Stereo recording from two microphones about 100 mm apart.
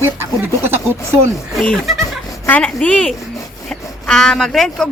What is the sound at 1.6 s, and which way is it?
Speech, 5° left (ahead or behind).